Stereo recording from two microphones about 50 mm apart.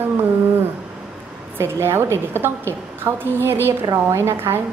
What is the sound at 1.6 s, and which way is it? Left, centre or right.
A woman's voice, right.